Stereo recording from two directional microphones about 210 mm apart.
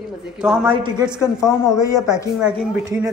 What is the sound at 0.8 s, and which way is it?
Speech, 20° right (ahead or behind).